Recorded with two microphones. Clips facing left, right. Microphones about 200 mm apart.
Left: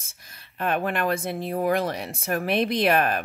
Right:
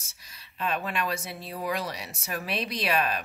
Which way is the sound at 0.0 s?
55° left (ahead or behind).